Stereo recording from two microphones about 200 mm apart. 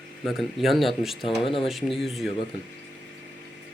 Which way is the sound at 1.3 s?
25° left (ahead or behind).